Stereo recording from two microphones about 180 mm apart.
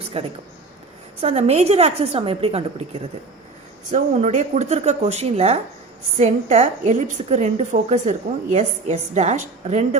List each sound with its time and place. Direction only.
0.1 s a woman's voice: 35° right (ahead or behind)